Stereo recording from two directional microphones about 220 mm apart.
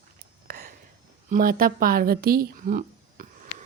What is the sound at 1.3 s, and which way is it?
Speech, 40° right (ahead or behind).